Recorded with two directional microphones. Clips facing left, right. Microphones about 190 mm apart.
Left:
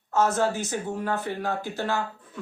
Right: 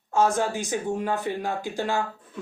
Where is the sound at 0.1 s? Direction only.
15° right (ahead or behind).